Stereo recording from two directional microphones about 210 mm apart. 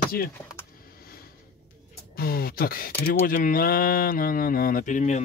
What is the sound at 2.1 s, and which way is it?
Speech, 45° left (ahead or behind).